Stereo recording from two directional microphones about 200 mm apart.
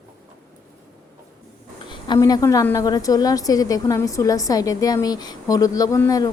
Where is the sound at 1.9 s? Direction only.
20° left (ahead or behind).